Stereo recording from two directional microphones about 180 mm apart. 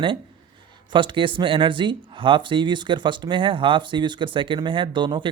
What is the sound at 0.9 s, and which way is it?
Speech, 25° right (ahead or behind).